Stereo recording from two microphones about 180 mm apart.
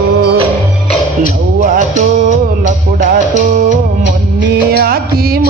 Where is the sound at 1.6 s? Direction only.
45° right (ahead or behind).